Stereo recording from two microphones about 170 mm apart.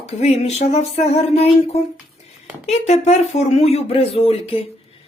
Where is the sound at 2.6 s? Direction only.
40° left (ahead or behind).